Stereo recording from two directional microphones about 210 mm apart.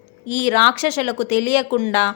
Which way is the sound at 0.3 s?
35° left (ahead or behind).